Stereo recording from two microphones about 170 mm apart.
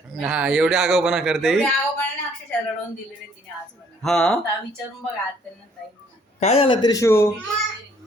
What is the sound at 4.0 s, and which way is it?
Speech, 5° left (ahead or behind).